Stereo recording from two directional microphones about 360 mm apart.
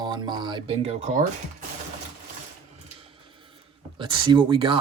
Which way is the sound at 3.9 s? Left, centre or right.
Centre.